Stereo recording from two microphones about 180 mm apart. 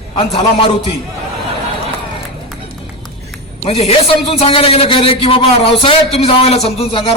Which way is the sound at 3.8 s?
35° left (ahead or behind).